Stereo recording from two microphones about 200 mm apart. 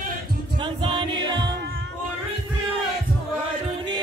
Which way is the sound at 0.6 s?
25° right (ahead or behind).